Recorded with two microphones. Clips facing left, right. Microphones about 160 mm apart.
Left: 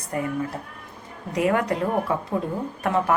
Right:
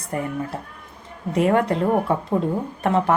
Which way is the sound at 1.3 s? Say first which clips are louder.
Right 3 dB; 30° right (ahead or behind).